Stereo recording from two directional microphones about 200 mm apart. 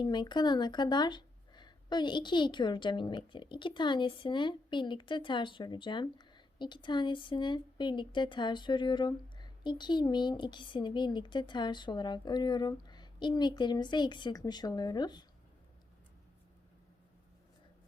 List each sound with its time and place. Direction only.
0.0 s speech: 20° left (ahead or behind)